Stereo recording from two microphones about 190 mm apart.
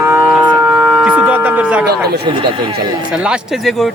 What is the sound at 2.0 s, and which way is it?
Speech, 55° right (ahead or behind).